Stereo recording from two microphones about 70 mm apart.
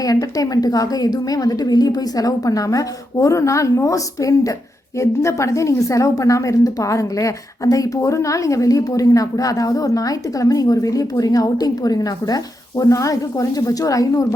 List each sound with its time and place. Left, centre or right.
0.0 s a woman's voice: left